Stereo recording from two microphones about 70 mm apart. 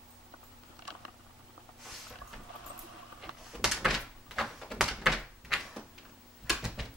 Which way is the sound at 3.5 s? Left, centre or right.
Centre.